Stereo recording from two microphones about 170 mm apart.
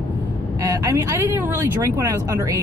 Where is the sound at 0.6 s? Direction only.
20° right (ahead or behind).